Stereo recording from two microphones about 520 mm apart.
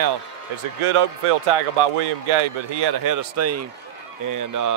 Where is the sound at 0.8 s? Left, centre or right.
Right.